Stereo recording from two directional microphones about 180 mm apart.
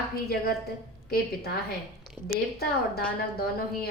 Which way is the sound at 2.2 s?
60° left (ahead or behind).